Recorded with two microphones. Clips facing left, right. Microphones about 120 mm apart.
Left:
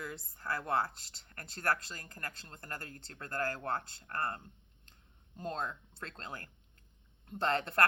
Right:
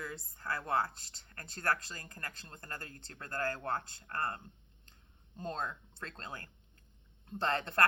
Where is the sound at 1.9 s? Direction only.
25° right (ahead or behind).